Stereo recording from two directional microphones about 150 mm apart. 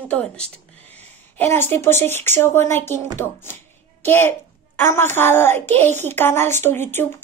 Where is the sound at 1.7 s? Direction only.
15° left (ahead or behind).